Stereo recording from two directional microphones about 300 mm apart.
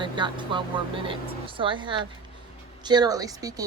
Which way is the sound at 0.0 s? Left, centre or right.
Centre.